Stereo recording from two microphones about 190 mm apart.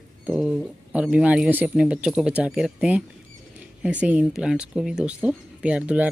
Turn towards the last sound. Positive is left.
turn(degrees=-5)  # may be behind; listen again after turning